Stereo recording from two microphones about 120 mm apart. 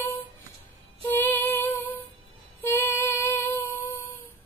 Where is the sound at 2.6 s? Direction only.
15° left (ahead or behind).